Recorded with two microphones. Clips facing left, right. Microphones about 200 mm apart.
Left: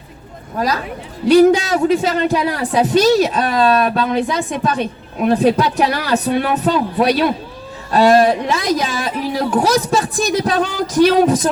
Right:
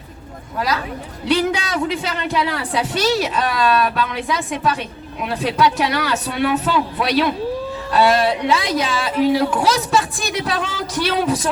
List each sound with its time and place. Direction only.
0.5 s a woman's voice: 40° left (ahead or behind)